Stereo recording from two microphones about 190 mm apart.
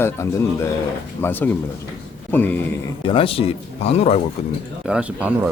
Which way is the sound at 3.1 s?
30° left (ahead or behind).